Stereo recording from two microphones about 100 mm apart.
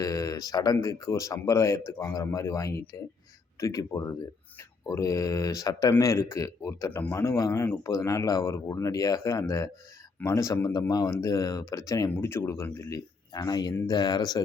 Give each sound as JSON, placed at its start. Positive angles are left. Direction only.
{"t": 0.0, "sound": "a man's voice", "side_deg": 35}
{"t": 12.1, "sound": "a man's voice", "side_deg": 25}
{"t": 12.9, "sound": "speech", "side_deg": 40}